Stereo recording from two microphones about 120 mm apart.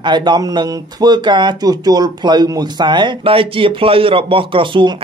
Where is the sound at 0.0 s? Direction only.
40° right (ahead or behind).